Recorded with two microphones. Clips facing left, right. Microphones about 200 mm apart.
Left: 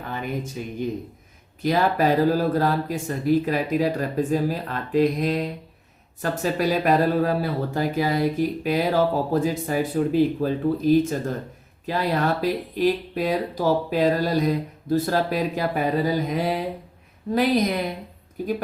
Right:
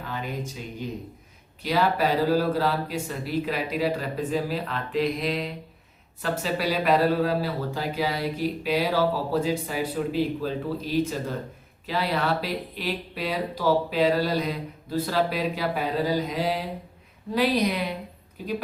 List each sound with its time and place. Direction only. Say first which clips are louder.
0.1 s speech: left 4 dB; 50° left (ahead or behind)